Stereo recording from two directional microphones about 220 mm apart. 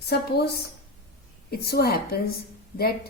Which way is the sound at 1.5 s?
45° left (ahead or behind).